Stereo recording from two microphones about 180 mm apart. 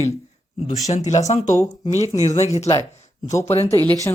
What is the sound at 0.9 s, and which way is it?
Speech, 40° left (ahead or behind).